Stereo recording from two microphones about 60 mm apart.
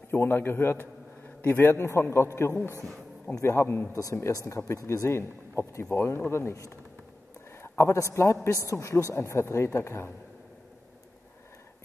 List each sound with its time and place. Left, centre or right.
0.1 s a man's voice: left
3.9 s speech: left
4.3 s speech: left
5.0 s speech: left
7.6 s a sound: left
8.1 s speech: left